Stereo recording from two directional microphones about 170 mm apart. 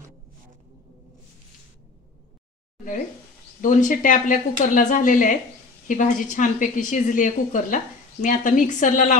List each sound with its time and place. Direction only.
3.6 s speech: 50° left (ahead or behind)